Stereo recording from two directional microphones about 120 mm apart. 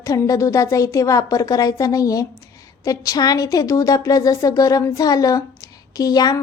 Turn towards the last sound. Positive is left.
turn(degrees=30)  # may be behind; listen again after turning